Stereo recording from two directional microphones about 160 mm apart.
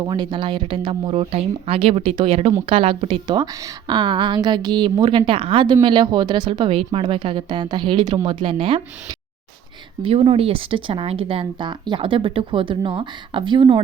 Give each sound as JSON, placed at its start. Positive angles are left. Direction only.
{"t": 0.0, "sound": "a woman's voice", "side_deg": -25}
{"t": 10.0, "sound": "speech", "side_deg": -35}